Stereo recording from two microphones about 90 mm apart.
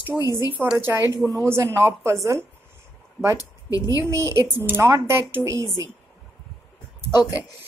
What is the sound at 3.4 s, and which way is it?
Speech, 40° left (ahead or behind).